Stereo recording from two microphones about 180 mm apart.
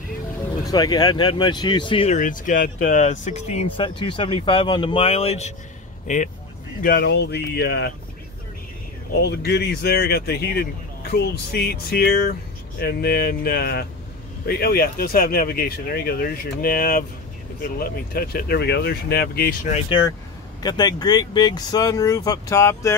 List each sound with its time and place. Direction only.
0.7 s speech: 20° left (ahead or behind)
2.1 s speech: 45° left (ahead or behind)
6.8 s speech: 60° left (ahead or behind)
9.1 s speech: 65° left (ahead or behind)
19.9 s speech: 20° left (ahead or behind)